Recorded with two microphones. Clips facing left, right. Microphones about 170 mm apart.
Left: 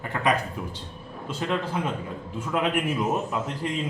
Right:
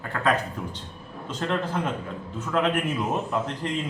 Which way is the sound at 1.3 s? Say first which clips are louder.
Even; 10° left (ahead or behind).